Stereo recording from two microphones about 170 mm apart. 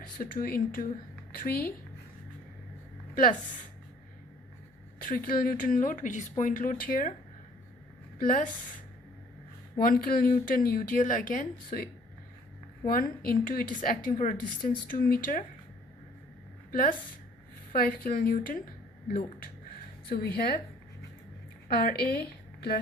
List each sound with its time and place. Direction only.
0.2 s a woman's voice: 60° left (ahead or behind)
3.2 s a woman's voice: 55° left (ahead or behind)
4.9 s speech: 55° left (ahead or behind)
8.2 s a woman's voice: 55° left (ahead or behind)
9.7 s a woman's voice: 60° left (ahead or behind)
12.9 s a woman's voice: 60° left (ahead or behind)
17.7 s a woman's voice: 60° left (ahead or behind)
21.7 s a woman's voice: 60° left (ahead or behind)